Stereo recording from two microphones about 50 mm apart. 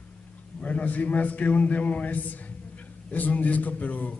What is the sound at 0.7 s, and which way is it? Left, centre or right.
A man's voice, left.